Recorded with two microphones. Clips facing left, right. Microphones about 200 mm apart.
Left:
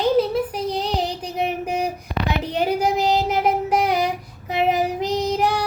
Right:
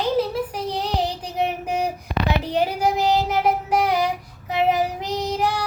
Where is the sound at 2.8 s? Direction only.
20° left (ahead or behind).